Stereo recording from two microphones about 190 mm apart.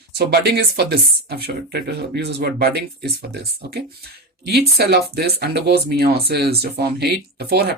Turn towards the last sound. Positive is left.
turn(degrees=-55)  # may be behind; listen again after turning